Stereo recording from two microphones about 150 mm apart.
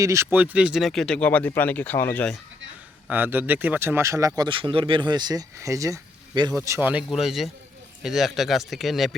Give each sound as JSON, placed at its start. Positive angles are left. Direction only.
{"t": 0.0, "sound": "speech", "side_deg": -20}
{"t": 3.1, "sound": "a man's voice", "side_deg": -15}
{"t": 4.4, "sound": "speech", "side_deg": -35}
{"t": 7.1, "sound": "speech", "side_deg": 0}